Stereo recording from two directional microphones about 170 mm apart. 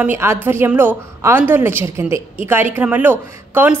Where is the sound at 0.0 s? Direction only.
15° right (ahead or behind).